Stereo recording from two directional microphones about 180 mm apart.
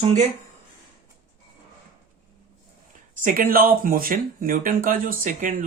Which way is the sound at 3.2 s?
50° right (ahead or behind).